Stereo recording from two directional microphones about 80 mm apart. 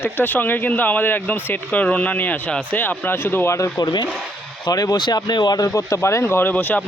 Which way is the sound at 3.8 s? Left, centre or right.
Left.